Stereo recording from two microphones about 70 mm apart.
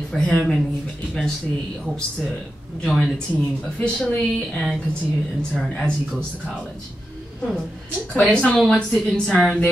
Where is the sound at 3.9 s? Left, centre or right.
Left.